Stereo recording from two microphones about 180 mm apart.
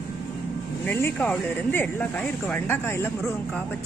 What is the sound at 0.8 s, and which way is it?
Speech, 10° left (ahead or behind).